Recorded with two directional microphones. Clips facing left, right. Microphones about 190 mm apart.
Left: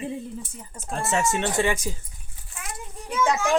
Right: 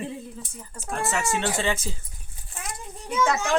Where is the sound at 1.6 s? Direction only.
15° left (ahead or behind).